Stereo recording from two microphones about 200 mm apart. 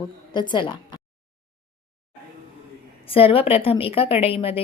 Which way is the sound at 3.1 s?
30° left (ahead or behind).